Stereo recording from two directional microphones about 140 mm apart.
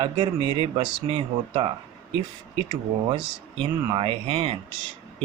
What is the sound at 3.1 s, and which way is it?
Speech, 35° right (ahead or behind).